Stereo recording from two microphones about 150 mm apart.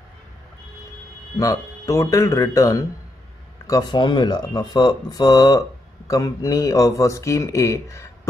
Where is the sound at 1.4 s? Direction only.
20° left (ahead or behind).